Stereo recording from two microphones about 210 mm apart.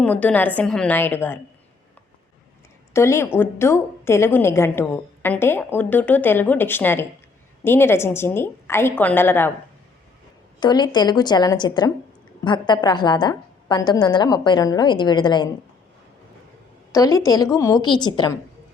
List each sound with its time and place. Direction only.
0.0 s a woman's voice: 5° left (ahead or behind)
2.9 s a woman's voice: 15° left (ahead or behind)
10.6 s a woman's voice: 20° left (ahead or behind)
16.9 s a woman's voice: 15° left (ahead or behind)